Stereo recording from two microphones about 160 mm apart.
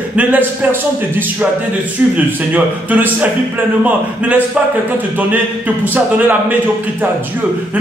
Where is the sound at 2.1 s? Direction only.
10° right (ahead or behind).